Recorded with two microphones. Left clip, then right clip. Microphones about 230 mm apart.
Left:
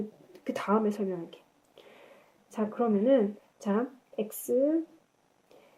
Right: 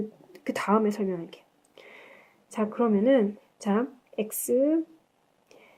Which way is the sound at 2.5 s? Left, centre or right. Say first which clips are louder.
Right 3 dB; right.